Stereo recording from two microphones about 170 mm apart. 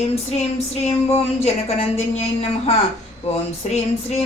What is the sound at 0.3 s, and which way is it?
A woman's voice, 40° left (ahead or behind).